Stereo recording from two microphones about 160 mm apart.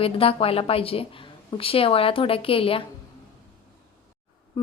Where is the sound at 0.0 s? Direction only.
35° left (ahead or behind).